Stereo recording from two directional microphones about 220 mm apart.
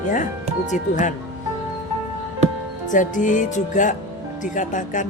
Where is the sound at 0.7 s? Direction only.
35° left (ahead or behind).